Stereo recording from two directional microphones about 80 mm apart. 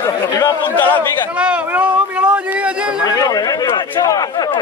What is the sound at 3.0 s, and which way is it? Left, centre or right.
Speech, left.